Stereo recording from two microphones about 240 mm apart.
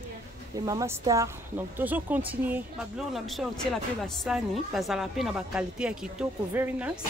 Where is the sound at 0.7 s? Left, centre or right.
Centre.